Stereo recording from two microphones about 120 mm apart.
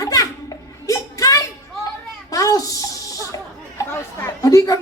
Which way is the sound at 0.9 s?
25° left (ahead or behind).